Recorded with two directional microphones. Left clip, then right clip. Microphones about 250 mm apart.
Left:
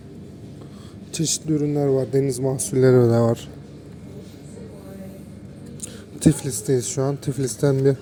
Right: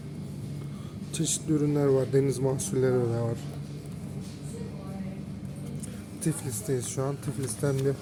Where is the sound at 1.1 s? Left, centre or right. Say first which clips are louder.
Left 5 dB; centre; by 3.3 s left.